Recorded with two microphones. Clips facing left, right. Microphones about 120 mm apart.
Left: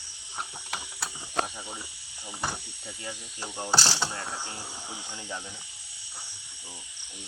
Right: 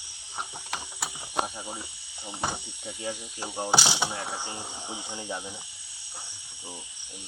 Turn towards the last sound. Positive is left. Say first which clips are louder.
# right 3 dB
turn(degrees=-15)  # may be behind; listen again after turning